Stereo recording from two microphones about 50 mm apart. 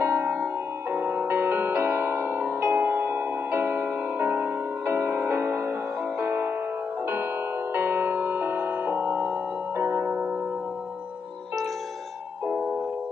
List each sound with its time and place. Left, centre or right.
0.0 s music: right
7.7 s music: right